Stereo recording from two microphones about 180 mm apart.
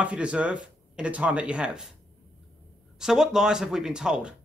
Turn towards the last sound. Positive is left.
turn(degrees=-5)  # may be behind; listen again after turning